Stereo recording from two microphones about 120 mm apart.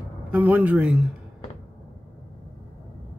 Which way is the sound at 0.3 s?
15° right (ahead or behind).